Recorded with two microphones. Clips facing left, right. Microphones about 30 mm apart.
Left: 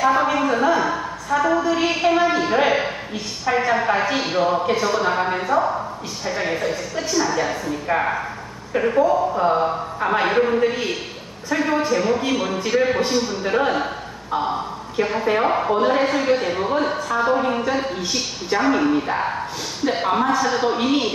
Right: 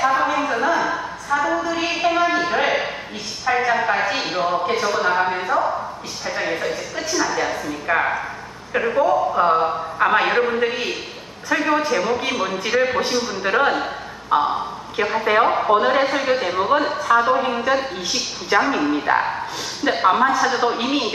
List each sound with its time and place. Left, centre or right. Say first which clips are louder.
0.0 s a sound: left 1 dB; centre
3.4 s a man's voice: even; centre; by 10.2 s right
10.2 s a man's voice: left 1 dB; centre
14.4 s a sound: right 2 dB; centre
15.4 s a man's voice: right 2 dB; centre
19.9 s a man's voice: right 3 dB; centre